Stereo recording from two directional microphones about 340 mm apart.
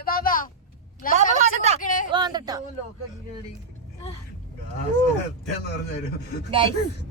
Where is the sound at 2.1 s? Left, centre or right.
Centre.